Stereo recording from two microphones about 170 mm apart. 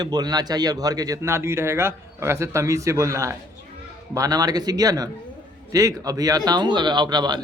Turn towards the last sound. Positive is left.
turn(degrees=-25)  # may be behind; listen again after turning